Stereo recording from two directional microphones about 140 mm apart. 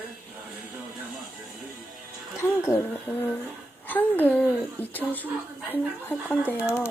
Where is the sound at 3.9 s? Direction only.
10° left (ahead or behind).